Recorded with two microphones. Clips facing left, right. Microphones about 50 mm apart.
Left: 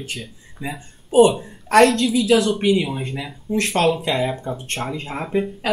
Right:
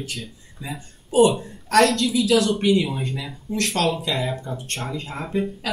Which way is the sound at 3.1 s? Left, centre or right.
Left.